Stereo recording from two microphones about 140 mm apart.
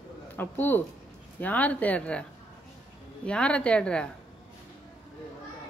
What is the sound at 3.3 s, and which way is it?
Speech, 10° left (ahead or behind).